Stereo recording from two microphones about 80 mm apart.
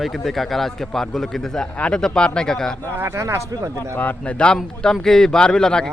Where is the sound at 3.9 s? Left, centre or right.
Left.